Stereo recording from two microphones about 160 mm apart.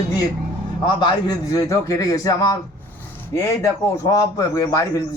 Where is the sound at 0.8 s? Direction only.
30° left (ahead or behind).